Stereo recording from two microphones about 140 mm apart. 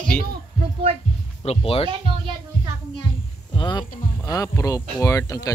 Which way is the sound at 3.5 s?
30° left (ahead or behind).